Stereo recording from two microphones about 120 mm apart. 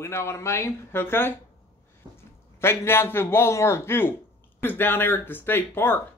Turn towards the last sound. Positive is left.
turn(degrees=15)  # may be behind; listen again after turning